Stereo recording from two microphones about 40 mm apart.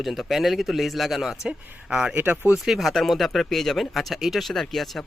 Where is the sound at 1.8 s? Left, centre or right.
Right.